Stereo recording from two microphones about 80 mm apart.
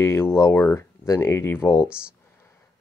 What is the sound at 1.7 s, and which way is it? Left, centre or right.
Speech, centre.